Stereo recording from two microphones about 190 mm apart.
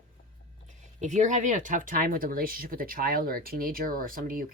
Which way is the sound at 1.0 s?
40° right (ahead or behind).